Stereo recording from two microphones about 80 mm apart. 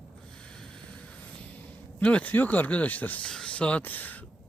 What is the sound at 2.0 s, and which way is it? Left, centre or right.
Speech, centre.